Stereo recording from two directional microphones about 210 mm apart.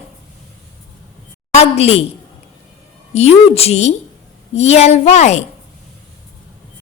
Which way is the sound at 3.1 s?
30° left (ahead or behind).